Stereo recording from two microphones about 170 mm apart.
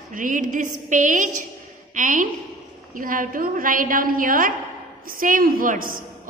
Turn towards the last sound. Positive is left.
turn(degrees=-55)  # may be behind; listen again after turning